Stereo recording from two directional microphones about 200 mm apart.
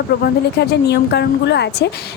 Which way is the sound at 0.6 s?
55° left (ahead or behind).